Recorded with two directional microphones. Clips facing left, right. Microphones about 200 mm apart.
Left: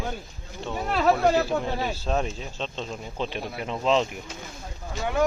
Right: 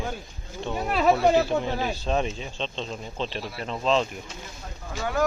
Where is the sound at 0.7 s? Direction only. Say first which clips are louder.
Right 1 dB; 5° right (ahead or behind); by 4.0 s 15° left (ahead or behind).